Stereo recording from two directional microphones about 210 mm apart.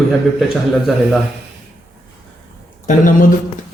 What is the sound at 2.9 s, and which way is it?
Speech, 40° left (ahead or behind).